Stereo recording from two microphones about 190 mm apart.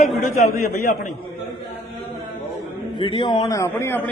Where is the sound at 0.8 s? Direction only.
50° left (ahead or behind).